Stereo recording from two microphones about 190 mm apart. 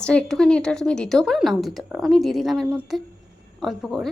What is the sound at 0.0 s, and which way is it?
A woman's voice, 5° left (ahead or behind).